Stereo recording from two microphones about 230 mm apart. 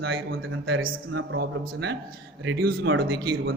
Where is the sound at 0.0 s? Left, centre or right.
Right.